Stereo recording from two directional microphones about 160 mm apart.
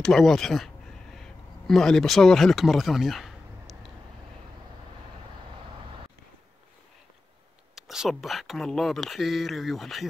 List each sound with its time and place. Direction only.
0.0 s speech: centre (ahead or behind)
1.2 s a sound: 5° left (ahead or behind)
7.7 s speech: centre (ahead or behind)